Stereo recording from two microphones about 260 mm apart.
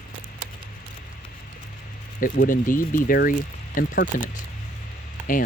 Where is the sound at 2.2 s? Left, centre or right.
Left.